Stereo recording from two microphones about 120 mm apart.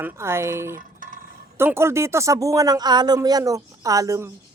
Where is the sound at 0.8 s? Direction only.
90° right.